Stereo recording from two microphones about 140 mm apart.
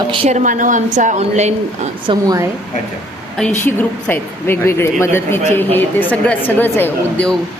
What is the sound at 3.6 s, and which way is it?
A woman's voice, 15° left (ahead or behind).